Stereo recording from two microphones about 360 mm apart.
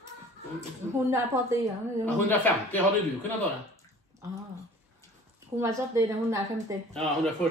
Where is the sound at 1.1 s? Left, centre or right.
Centre.